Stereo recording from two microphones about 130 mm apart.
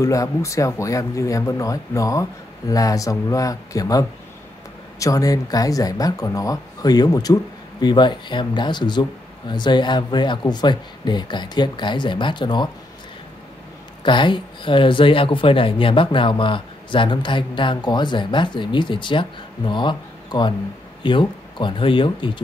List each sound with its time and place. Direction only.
0.0 s speech: 25° left (ahead or behind)
14.0 s speech: 35° left (ahead or behind)